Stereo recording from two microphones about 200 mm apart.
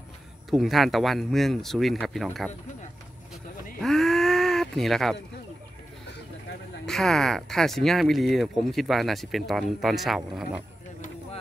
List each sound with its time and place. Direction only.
0.5 s speech: centre (ahead or behind)
3.8 s groan: centre (ahead or behind)
6.9 s speech: centre (ahead or behind)